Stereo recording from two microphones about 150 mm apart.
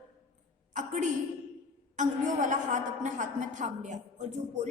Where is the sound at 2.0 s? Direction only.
55° right (ahead or behind).